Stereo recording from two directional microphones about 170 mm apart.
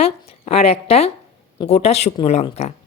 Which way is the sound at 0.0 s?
35° left (ahead or behind).